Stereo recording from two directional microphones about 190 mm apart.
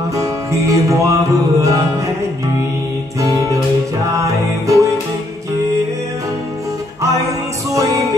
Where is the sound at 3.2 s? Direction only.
15° right (ahead or behind).